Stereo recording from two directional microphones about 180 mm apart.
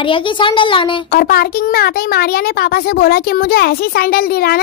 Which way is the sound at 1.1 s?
55° left (ahead or behind).